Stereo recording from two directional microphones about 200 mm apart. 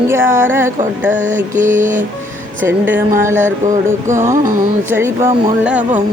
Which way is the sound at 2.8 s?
10° right (ahead or behind).